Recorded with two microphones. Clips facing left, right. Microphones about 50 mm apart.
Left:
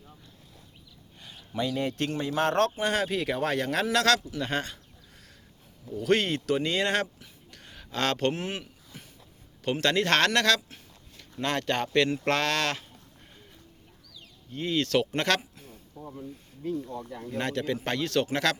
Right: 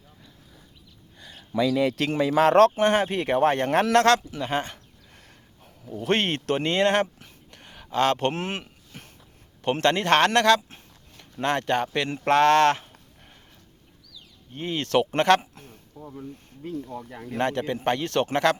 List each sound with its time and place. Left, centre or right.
1.7 s speech: right
2.8 s speech: right
4.4 s speech: centre
6.0 s speech: right
6.7 s speech: right
7.5 s a sound: right
7.9 s speech: right
8.3 s a sound: right
9.8 s speech: right
14.5 s speech: right
15.5 s a sound: right
16.6 s speech: right